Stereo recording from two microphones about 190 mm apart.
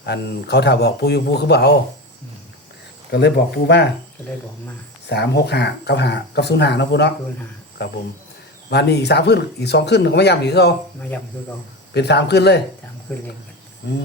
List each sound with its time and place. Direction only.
0.0 s speech: 60° left (ahead or behind)
3.1 s speech: 60° left (ahead or behind)
5.0 s speech: 60° left (ahead or behind)
8.7 s speech: 60° left (ahead or behind)
11.9 s speech: 65° left (ahead or behind)
13.8 s speech: 65° left (ahead or behind)